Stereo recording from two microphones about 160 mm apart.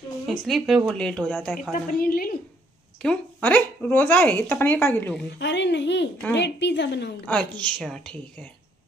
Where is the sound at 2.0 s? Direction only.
65° left (ahead or behind).